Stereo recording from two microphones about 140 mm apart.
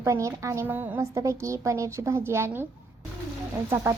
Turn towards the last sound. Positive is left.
turn(degrees=-20)  # may be behind; listen again after turning